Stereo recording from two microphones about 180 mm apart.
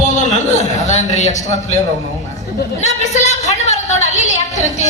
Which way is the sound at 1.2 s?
40° left (ahead or behind).